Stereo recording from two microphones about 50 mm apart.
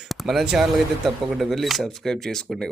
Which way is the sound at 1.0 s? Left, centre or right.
Centre.